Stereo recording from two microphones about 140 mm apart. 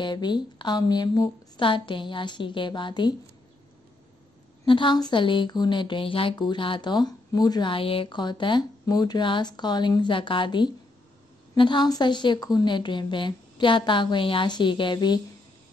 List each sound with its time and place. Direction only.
0.0 s speech: 30° left (ahead or behind)
4.6 s speech: 35° left (ahead or behind)